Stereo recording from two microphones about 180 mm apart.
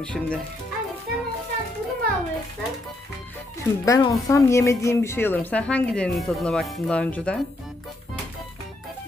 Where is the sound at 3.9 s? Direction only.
20° left (ahead or behind).